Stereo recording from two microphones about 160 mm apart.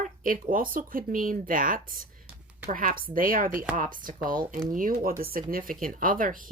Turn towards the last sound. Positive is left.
turn(degrees=-60)  # may be behind; listen again after turning